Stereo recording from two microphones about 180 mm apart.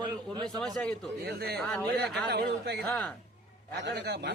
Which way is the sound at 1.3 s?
60° right (ahead or behind).